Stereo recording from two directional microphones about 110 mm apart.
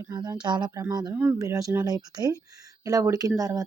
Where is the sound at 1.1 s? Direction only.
20° right (ahead or behind).